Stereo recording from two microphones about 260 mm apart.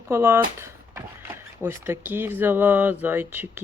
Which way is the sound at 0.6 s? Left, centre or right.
Centre.